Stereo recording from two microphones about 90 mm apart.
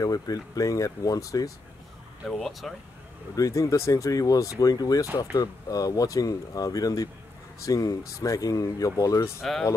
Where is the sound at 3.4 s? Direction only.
40° left (ahead or behind).